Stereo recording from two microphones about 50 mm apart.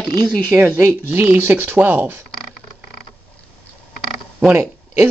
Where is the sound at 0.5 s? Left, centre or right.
Right.